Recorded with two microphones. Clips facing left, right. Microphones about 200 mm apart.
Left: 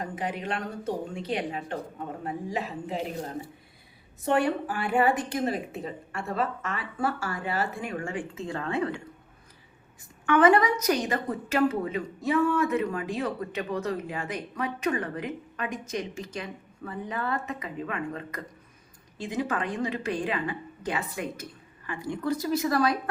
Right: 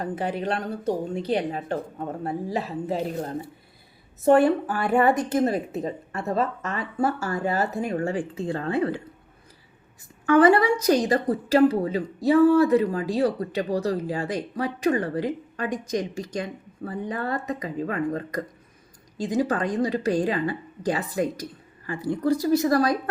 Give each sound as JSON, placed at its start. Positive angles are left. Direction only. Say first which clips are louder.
{"t": 0.0, "sound": "a woman's voice", "louder": "right 5 dB", "side_deg": -35}
{"t": 4.2, "sound": "a woman's voice", "louder": "right 7 dB", "side_deg": -40}
{"t": 10.2, "sound": "a woman's voice", "louder": "right 4 dB", "side_deg": -35}